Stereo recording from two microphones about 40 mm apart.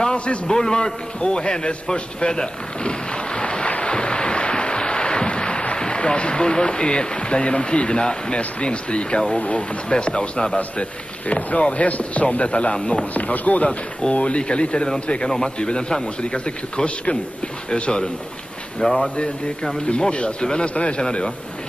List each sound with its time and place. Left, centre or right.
0.0 s a man's voice: left
13.1 s speech: left
13.7 s a man's voice: left
18.8 s speech: centre
19.9 s a man's voice: left